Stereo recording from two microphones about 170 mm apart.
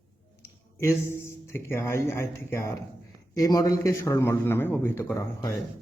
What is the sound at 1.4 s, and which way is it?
A man's voice, 15° left (ahead or behind).